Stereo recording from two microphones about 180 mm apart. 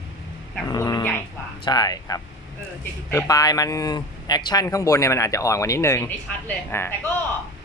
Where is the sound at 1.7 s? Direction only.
20° left (ahead or behind).